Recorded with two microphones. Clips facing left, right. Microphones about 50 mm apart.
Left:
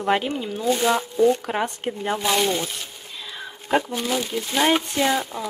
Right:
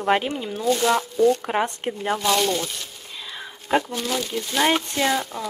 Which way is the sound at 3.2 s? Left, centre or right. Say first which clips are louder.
Left 1 dB; centre.